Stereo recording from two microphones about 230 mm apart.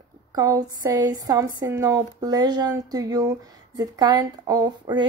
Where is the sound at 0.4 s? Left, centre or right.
Centre.